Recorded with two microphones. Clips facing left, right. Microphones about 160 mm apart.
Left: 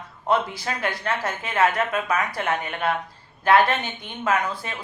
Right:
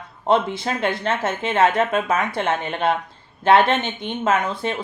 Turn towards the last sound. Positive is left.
turn(degrees=-25)  # may be behind; listen again after turning